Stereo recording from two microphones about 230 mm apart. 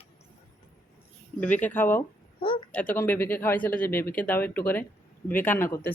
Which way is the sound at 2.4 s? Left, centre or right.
Left.